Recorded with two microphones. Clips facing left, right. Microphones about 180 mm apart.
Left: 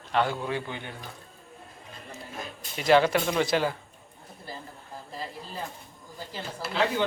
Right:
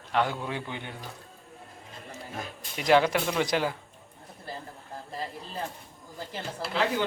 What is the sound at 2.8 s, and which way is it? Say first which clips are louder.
Speech: left 1 dB; 15° right (ahead or behind).